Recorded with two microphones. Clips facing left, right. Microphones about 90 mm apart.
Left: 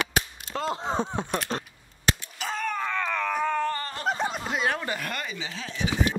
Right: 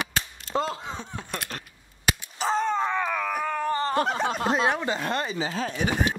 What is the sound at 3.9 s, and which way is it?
Speech, 70° right (ahead or behind).